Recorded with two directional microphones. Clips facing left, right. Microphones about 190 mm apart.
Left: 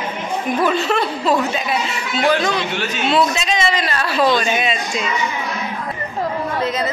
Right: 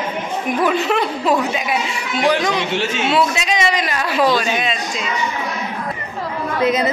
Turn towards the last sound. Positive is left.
turn(degrees=-15)  # may be behind; listen again after turning